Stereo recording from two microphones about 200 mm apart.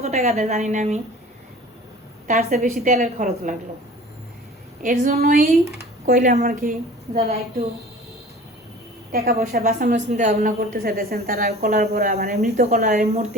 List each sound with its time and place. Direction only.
0.0 s a woman's voice: 35° right (ahead or behind)
2.2 s a woman's voice: 40° right (ahead or behind)
4.8 s a woman's voice: 40° right (ahead or behind)
9.1 s a woman's voice: 45° right (ahead or behind)